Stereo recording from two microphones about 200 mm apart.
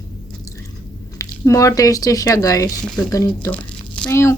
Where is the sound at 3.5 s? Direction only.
5° left (ahead or behind).